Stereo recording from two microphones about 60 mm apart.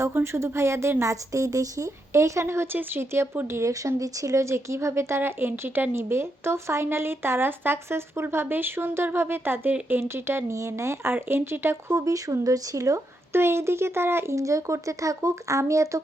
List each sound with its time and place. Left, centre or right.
0.0 s speech: right
3.5 s speech: right
10.5 s speech: right
11.1 s speech: right
11.9 s speech: right
13.3 s speech: right
14.3 s speech: right